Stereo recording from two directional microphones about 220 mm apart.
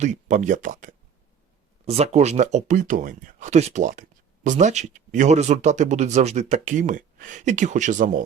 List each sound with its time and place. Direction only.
0.0 s speech: 35° right (ahead or behind)